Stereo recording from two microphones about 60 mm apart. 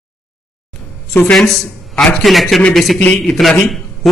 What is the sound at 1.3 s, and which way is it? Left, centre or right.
A man's voice, centre.